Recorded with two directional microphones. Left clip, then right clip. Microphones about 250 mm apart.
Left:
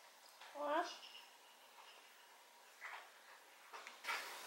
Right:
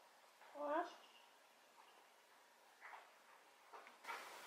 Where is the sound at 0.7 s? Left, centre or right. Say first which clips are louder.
Left 3 dB; centre.